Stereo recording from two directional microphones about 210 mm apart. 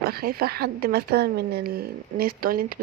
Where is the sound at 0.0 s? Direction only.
45° right (ahead or behind).